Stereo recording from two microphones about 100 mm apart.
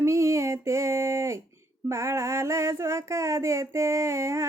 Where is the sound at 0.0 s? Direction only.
30° right (ahead or behind).